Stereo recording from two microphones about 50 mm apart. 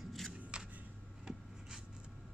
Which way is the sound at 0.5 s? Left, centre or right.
Centre.